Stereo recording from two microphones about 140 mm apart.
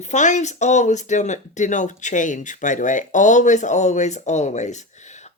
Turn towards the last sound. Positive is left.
turn(degrees=55)  # may be behind; listen again after turning